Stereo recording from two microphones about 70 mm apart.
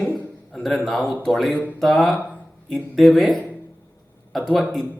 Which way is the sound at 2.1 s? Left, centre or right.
Centre.